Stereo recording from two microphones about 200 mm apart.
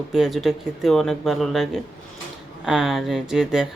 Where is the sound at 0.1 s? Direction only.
Centre (ahead or behind).